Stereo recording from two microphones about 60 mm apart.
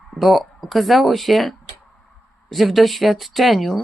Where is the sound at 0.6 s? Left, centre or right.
Centre.